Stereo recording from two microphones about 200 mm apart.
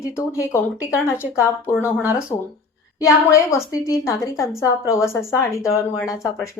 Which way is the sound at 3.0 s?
15° left (ahead or behind).